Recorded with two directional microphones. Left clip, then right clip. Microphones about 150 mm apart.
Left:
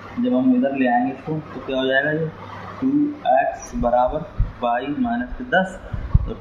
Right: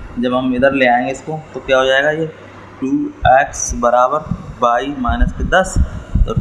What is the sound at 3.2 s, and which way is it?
A man's voice, 40° right (ahead or behind).